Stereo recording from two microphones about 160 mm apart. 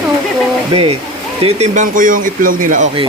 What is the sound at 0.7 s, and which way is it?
Speech, 35° right (ahead or behind).